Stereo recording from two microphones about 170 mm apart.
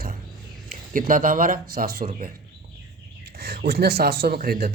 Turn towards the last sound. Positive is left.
turn(degrees=-60)  # may be behind; listen again after turning